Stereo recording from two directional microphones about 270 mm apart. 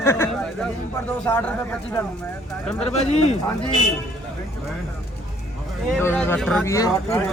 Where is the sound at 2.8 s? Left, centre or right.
Left.